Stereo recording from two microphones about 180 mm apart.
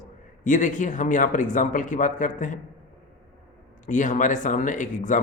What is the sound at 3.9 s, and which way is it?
A man's voice, 45° left (ahead or behind).